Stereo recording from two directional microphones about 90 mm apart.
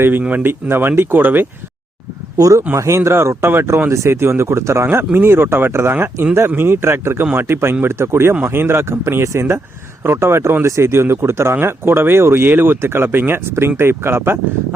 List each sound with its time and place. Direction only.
0.0 s speech: 20° right (ahead or behind)
2.4 s speech: 35° right (ahead or behind)